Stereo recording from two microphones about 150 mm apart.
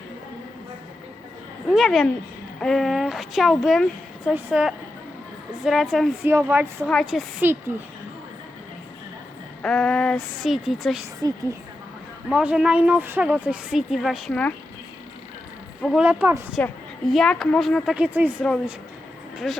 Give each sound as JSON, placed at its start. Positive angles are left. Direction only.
{"t": 1.7, "sound": "a woman's voice", "side_deg": 0}
{"t": 6.2, "sound": "a woman's voice", "side_deg": -15}
{"t": 6.8, "sound": "a woman's voice", "side_deg": 0}
{"t": 9.6, "sound": "a woman's voice", "side_deg": 5}
{"t": 11.2, "sound": "a woman's voice", "side_deg": -25}
{"t": 12.3, "sound": "a woman's voice", "side_deg": -10}
{"t": 16.0, "sound": "a woman's voice", "side_deg": -10}
{"t": 17.1, "sound": "a woman's voice", "side_deg": 0}
{"t": 17.9, "sound": "a woman's voice", "side_deg": -10}
{"t": 19.4, "sound": "a woman's voice", "side_deg": 0}